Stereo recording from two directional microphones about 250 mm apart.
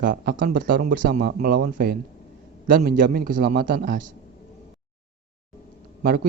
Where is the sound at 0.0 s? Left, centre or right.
Right.